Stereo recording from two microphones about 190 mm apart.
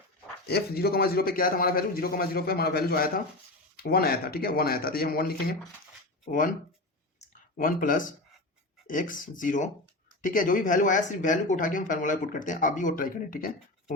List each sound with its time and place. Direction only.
0.4 s speech: 55° left (ahead or behind)
7.2 s a sound: 45° left (ahead or behind)
8.9 s speech: 45° left (ahead or behind)